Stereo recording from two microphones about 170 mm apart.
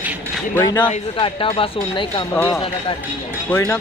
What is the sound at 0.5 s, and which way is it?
Speech, 25° left (ahead or behind).